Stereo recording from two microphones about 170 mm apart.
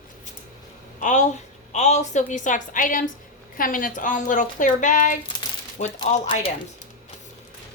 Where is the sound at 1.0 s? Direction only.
45° left (ahead or behind).